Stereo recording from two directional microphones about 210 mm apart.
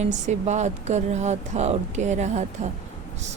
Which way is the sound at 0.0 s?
35° right (ahead or behind).